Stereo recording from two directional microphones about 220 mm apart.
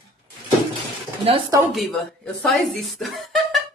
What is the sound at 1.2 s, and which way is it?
Speech, 25° right (ahead or behind).